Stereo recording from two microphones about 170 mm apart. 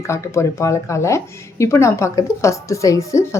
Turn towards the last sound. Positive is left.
turn(degrees=15)  # may be behind; listen again after turning